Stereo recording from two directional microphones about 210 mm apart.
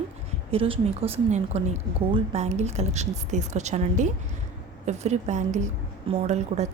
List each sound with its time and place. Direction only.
0.5 s speech: 25° right (ahead or behind)